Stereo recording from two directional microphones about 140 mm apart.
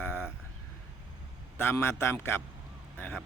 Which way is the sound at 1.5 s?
15° left (ahead or behind).